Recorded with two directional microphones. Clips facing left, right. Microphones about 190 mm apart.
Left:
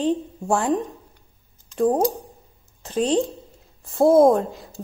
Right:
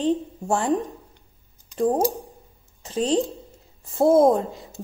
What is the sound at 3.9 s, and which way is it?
Speech, 5° right (ahead or behind).